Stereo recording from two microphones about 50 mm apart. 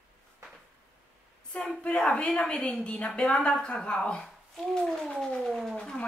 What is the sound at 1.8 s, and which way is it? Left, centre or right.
A woman's voice, left.